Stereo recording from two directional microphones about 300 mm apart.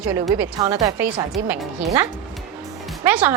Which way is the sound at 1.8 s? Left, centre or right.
Centre.